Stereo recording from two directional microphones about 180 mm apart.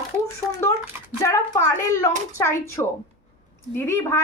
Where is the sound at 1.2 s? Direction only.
15° left (ahead or behind).